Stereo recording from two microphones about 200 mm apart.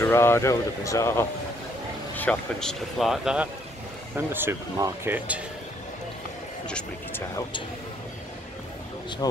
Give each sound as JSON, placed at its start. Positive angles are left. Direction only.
{"t": 0.0, "sound": "speech", "side_deg": 10}
{"t": 6.7, "sound": "speech", "side_deg": 10}
{"t": 9.2, "sound": "speech", "side_deg": 20}